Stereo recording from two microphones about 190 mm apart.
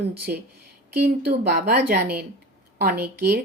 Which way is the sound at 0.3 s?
50° right (ahead or behind).